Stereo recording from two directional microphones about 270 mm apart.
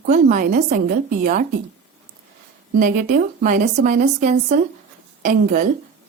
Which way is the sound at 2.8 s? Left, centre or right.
Right.